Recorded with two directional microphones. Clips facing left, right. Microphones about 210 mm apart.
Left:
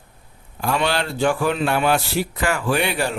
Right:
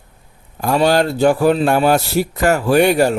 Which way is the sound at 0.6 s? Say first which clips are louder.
Right 7 dB; 40° right (ahead or behind).